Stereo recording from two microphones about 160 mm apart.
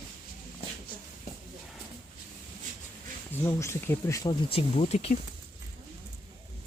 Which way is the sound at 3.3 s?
15° left (ahead or behind).